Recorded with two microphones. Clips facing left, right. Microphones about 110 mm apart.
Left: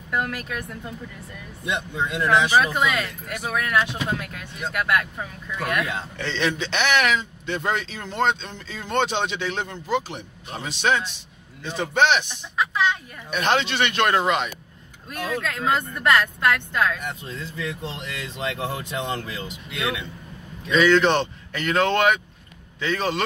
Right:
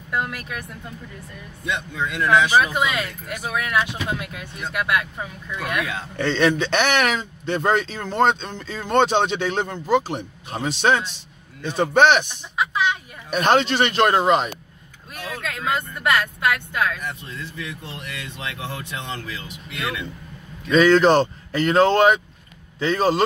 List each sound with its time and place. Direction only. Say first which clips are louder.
2.0 s speech: even; 20° left (ahead or behind)
2.5 s speech: right 1 dB; 10° right (ahead or behind)
6.1 s a man's voice: right 7 dB; 50° right (ahead or behind)
11.6 s a man's voice: right 5 dB; 50° right (ahead or behind)
12.5 s a sound: right 1 dB; 10° right (ahead or behind)
13.3 s speech: right 4 dB; 40° right (ahead or behind)
15.4 s speech: even; 15° right (ahead or behind)
17.0 s speech: even; 30° left (ahead or behind)
20.7 s speech: right 3 dB; 40° right (ahead or behind)